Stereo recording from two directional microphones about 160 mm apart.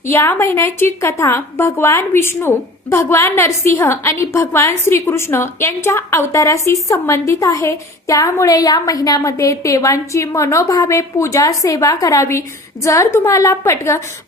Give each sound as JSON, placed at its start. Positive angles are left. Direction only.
{"t": 0.1, "sound": "a woman's voice", "side_deg": 15}